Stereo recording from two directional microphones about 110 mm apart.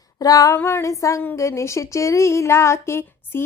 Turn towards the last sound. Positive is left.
turn(degrees=25)  # may be behind; listen again after turning